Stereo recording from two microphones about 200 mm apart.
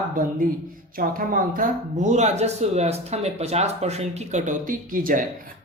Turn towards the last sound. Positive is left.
turn(degrees=-45)  # may be behind; listen again after turning